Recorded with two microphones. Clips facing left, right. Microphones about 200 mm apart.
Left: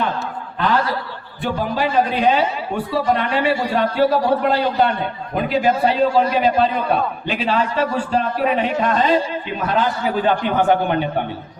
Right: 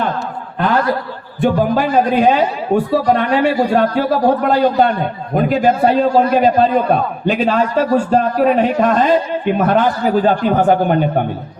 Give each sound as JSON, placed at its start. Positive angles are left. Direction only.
{"t": 0.6, "sound": "chuckle", "side_deg": -50}
{"t": 1.4, "sound": "a man's voice", "side_deg": -50}